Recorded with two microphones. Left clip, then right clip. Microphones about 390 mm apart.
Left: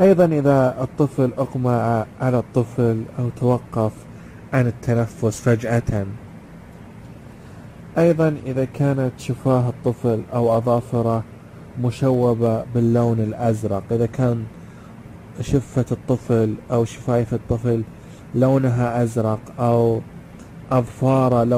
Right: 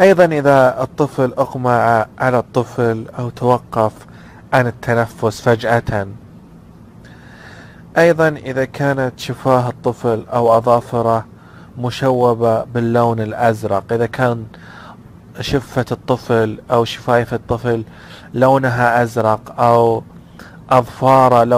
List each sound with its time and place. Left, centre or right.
0.0 s a man's voice: right
4.5 s a man's voice: centre
7.9 s a man's voice: right
15.5 s a man's voice: right